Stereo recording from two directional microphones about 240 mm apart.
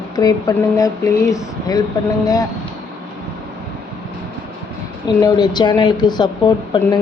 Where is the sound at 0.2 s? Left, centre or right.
Centre.